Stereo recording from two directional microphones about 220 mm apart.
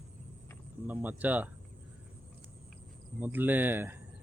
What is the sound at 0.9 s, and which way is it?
Speech, 5° right (ahead or behind).